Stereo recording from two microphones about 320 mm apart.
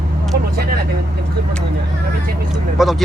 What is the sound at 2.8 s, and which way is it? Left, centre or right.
Speech, centre.